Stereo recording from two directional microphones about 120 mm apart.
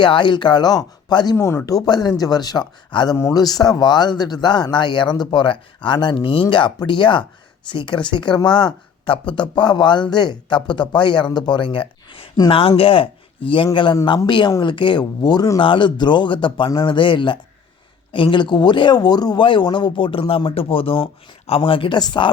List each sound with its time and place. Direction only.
0.0 s speech: 40° left (ahead or behind)